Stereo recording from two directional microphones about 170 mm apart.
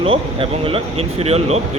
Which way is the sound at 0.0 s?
35° right (ahead or behind).